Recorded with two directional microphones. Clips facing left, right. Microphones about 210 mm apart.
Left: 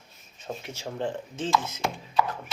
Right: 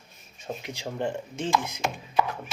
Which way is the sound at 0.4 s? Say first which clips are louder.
Right 1 dB; 15° right (ahead or behind).